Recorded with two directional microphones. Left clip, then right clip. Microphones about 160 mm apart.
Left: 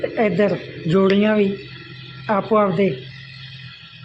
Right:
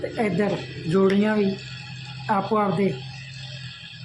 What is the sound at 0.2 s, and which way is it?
Speech, 20° left (ahead or behind).